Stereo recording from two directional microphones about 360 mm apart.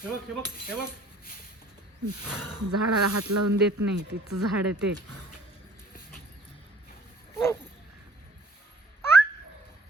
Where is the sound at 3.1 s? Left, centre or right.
Right.